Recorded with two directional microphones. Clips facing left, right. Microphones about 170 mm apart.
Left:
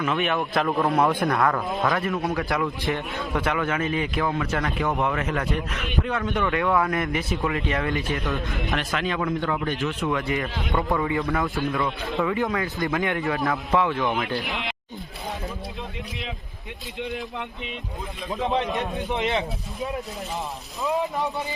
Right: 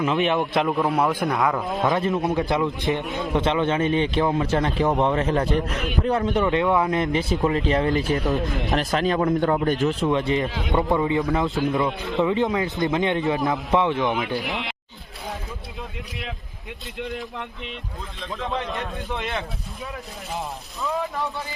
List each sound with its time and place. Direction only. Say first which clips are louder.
0.0 s a man's voice: right 3 dB; 25° right (ahead or behind)
0.6 s a man's voice: left 4 dB; 5° right (ahead or behind); by 9.9 s 40° right (ahead or behind)
10.1 s a man's voice: right 4 dB; 25° right (ahead or behind)
14.5 s speech: right 1 dB; centre (ahead or behind)
17.0 s a man's voice: even; centre (ahead or behind)
18.3 s a man's voice: left 4 dB; 20° left (ahead or behind)
20.8 s speech: left 2 dB; 15° left (ahead or behind)